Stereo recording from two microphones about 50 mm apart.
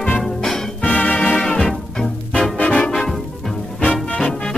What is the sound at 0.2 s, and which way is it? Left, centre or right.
Music, centre.